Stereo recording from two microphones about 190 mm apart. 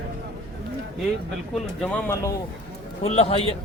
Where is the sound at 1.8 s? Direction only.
5° left (ahead or behind).